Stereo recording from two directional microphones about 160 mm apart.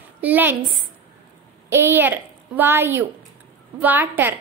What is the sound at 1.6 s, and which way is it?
A woman's voice, 15° right (ahead or behind).